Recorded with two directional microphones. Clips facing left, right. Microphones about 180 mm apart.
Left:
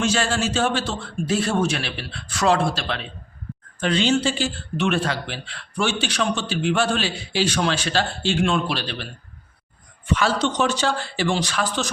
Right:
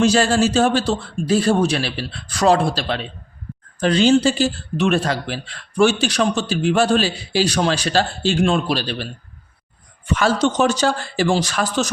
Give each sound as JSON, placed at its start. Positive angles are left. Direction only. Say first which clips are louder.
{"t": 0.0, "sound": "a man's voice", "louder": "right 7 dB", "side_deg": -35}
{"t": 10.2, "sound": "speech", "louder": "right 5 dB", "side_deg": -45}